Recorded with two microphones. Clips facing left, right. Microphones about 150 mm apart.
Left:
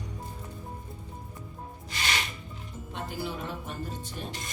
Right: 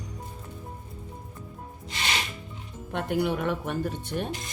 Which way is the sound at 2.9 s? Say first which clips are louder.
Right 9 dB; 65° right (ahead or behind).